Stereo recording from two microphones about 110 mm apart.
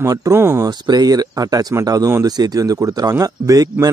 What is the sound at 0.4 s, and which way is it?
Speech, 20° right (ahead or behind).